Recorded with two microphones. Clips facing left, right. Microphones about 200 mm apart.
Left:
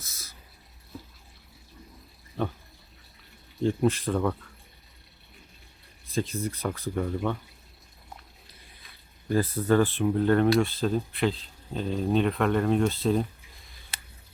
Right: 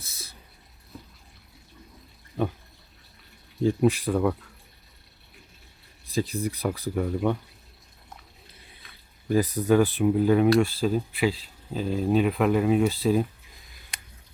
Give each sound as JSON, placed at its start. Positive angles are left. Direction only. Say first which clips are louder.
{"t": 0.0, "sound": "a sound", "louder": "right 3 dB", "side_deg": -30}
{"t": 0.9, "sound": "water", "louder": "left 2 dB", "side_deg": 0}
{"t": 3.6, "sound": "speech", "louder": "right 3 dB", "side_deg": -5}
{"t": 3.8, "sound": "speech", "louder": "right 3 dB", "side_deg": -15}
{"t": 6.3, "sound": "speech", "louder": "right 3 dB", "side_deg": -15}
{"t": 9.3, "sound": "speech", "louder": "right 2 dB", "side_deg": -10}